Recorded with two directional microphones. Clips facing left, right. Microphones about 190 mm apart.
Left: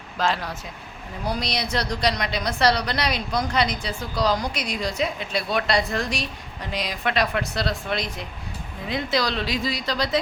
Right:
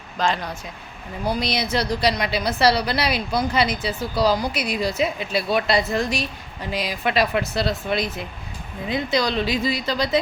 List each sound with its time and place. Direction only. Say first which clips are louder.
0.2 s a woman's voice: right 1 dB; 5° left (ahead or behind)